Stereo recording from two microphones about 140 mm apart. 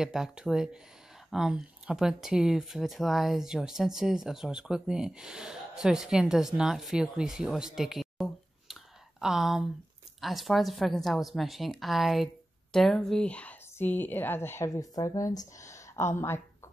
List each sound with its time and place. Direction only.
0.0 s speech: 5° right (ahead or behind); by 16.7 s 20° left (ahead or behind)